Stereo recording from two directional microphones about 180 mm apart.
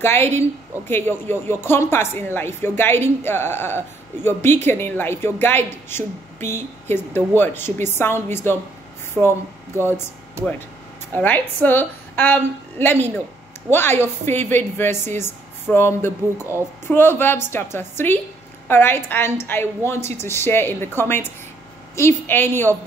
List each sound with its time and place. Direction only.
0.0 s a woman's voice: 15° left (ahead or behind)
10.4 s speech: 15° right (ahead or behind)
11.1 s a woman's voice: 10° left (ahead or behind)